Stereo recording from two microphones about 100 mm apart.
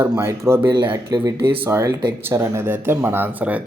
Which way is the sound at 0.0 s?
30° right (ahead or behind).